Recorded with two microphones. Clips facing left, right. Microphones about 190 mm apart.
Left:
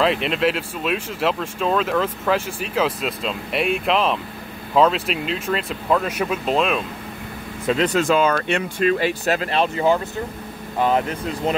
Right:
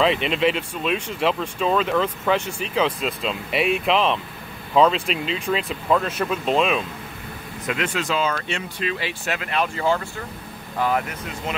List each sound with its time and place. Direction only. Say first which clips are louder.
0.0 s speech: even; centre (ahead or behind)
7.6 s speech: left 7 dB; 35° left (ahead or behind)
9.8 s speech: left 4 dB; 20° left (ahead or behind)
11.5 s speech: left 7 dB; 35° left (ahead or behind)